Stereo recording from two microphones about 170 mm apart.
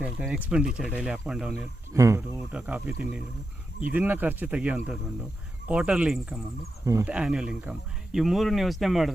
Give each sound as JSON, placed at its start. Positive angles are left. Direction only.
{"t": 0.0, "sound": "speech", "side_deg": -5}
{"t": 1.9, "sound": "speech", "side_deg": -15}
{"t": 6.8, "sound": "speech", "side_deg": -20}
{"t": 7.1, "sound": "speech", "side_deg": -5}